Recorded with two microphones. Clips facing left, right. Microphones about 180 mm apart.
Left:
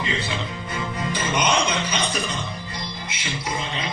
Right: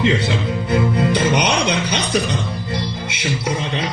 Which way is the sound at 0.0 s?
70° right (ahead or behind).